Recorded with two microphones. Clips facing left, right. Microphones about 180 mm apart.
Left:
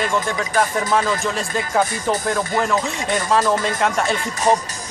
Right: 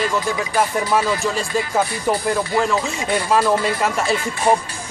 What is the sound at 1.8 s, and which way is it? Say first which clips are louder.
Speech: left 2 dB; 45° left (ahead or behind).